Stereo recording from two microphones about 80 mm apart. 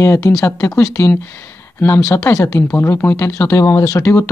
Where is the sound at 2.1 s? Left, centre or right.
Left.